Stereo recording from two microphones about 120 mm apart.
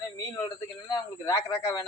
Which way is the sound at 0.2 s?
30° left (ahead or behind).